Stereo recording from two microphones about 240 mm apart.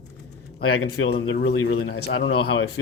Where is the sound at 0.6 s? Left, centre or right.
Left.